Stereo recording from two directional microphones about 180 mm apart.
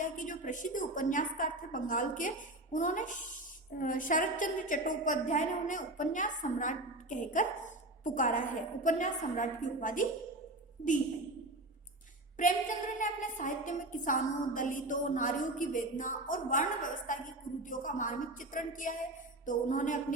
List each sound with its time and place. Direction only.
0.0 s a woman's voice: 45° left (ahead or behind)
12.4 s a woman's voice: 45° left (ahead or behind)